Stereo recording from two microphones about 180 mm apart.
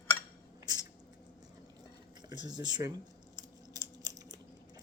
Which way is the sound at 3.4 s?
20° right (ahead or behind).